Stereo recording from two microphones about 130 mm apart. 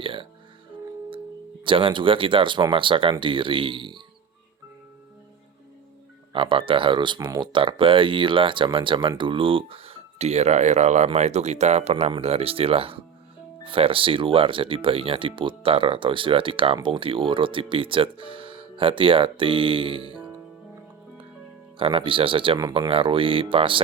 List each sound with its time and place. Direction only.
0.0 s music: 40° right (ahead or behind)
1.6 s speech: 40° right (ahead or behind)
6.3 s speech: 40° right (ahead or behind)
21.8 s speech: 45° right (ahead or behind)